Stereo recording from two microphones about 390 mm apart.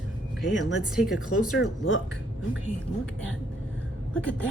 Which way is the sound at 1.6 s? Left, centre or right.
Left.